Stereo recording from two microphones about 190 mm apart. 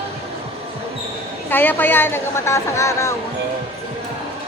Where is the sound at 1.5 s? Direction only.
10° left (ahead or behind).